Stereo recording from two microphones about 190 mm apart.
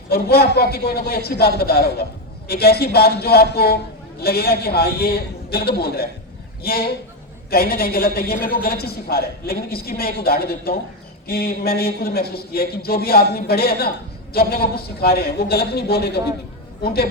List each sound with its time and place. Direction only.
0.1 s a man's voice: 55° left (ahead or behind)